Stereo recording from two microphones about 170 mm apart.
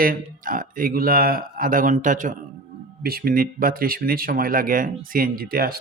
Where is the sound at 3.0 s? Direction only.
60° right (ahead or behind).